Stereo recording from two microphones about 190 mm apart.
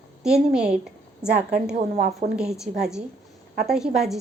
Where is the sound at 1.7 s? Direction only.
45° right (ahead or behind).